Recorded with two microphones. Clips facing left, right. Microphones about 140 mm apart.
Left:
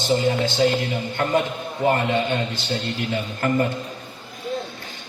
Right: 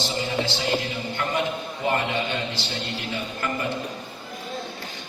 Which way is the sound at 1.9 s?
45° left (ahead or behind).